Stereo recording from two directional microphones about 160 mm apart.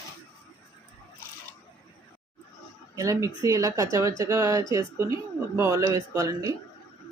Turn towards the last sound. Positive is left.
turn(degrees=-20)  # may be behind; listen again after turning